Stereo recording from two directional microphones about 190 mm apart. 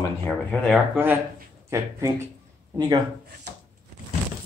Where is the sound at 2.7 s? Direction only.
20° right (ahead or behind).